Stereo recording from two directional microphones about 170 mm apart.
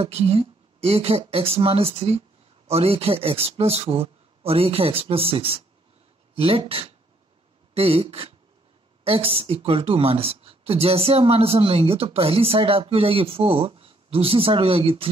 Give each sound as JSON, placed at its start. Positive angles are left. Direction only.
{"t": 0.0, "sound": "speech", "side_deg": -35}